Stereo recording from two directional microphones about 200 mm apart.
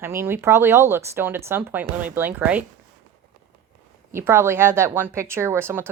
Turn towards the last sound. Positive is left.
turn(degrees=-10)  # may be behind; listen again after turning